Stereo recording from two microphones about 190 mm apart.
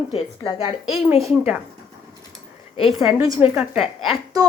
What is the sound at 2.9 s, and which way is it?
Speech, centre (ahead or behind).